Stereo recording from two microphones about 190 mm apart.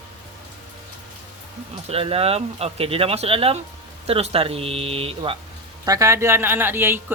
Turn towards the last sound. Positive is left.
turn(degrees=-10)  # may be behind; listen again after turning